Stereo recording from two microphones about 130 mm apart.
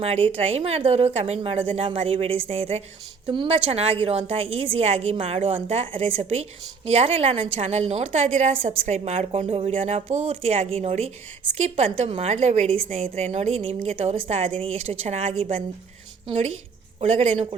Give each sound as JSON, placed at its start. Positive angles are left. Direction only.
{"t": 0.0, "sound": "a woman's voice", "side_deg": -50}
{"t": 1.4, "sound": "a woman's voice", "side_deg": -45}
{"t": 1.7, "sound": "a woman's voice", "side_deg": -55}
{"t": 3.2, "sound": "a woman's voice", "side_deg": -40}
{"t": 17.0, "sound": "a woman's voice", "side_deg": -55}